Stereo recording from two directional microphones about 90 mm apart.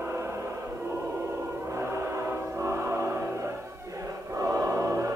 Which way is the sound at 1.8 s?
30° right (ahead or behind).